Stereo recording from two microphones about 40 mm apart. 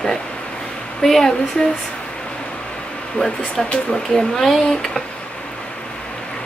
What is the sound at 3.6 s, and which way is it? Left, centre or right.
A woman's voice, centre.